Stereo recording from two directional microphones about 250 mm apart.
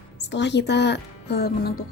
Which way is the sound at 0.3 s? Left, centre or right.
Left.